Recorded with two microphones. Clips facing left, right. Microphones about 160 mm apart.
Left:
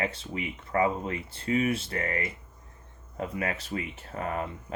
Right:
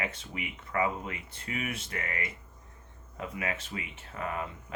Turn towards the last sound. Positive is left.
turn(degrees=35)  # may be behind; listen again after turning